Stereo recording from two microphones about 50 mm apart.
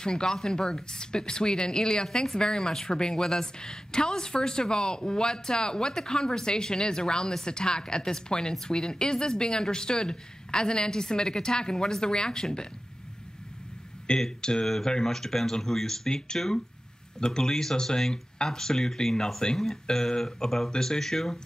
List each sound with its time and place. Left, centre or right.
0.0 s speech: centre
14.0 s speech: centre